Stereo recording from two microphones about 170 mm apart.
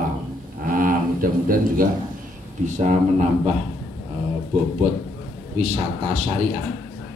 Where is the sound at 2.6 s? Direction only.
45° right (ahead or behind).